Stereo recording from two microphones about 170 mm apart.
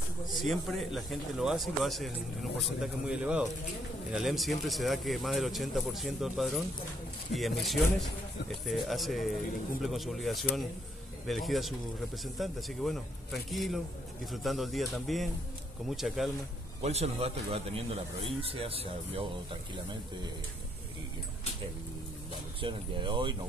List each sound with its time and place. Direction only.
0.3 s speech: centre (ahead or behind)
16.8 s a man's voice: 40° right (ahead or behind)
22.6 s speech: 30° right (ahead or behind)